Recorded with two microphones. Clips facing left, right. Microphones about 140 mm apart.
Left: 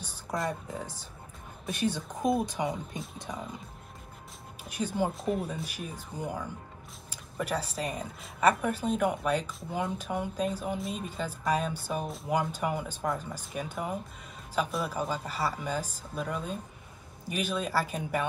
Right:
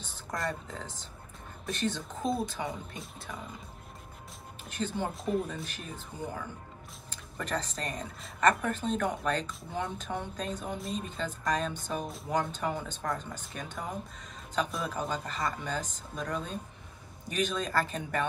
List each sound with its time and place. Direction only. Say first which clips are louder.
0.0 s a woman's voice: left 2 dB; 10° left (ahead or behind)
4.6 s a woman's voice: left 3 dB; 10° left (ahead or behind)